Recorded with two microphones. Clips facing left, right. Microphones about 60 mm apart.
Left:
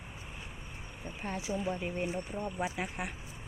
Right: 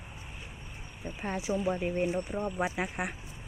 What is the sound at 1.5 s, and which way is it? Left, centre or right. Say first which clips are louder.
Speech: right 4 dB; right.